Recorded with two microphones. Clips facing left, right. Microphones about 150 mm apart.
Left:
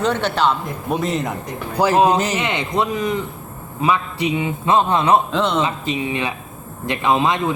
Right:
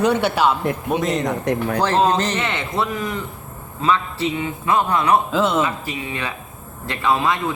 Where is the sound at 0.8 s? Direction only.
Centre (ahead or behind); by 5.2 s 25° left (ahead or behind).